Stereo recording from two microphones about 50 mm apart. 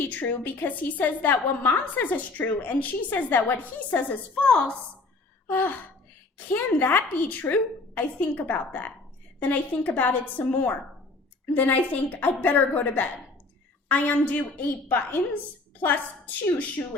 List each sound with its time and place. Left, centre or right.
0.0 s a woman's voice: left
5.5 s a woman's voice: left
14.8 s a woman's voice: left